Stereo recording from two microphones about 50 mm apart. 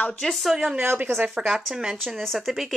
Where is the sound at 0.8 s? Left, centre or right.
Right.